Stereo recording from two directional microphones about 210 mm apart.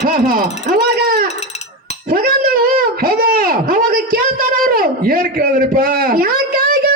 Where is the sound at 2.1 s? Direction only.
45° right (ahead or behind).